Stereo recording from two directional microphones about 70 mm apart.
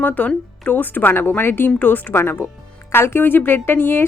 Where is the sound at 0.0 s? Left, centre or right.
Left.